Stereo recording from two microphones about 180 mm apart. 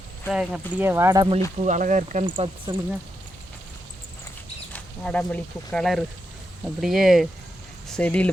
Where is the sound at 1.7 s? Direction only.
45° right (ahead or behind).